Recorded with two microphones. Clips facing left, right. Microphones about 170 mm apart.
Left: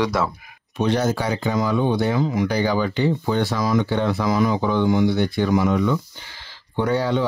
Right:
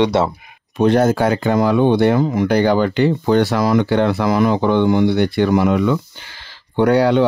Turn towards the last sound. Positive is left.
turn(degrees=-70)  # may be behind; listen again after turning